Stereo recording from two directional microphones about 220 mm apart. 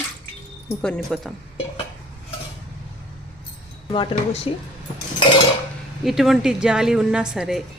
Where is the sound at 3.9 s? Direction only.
20° left (ahead or behind).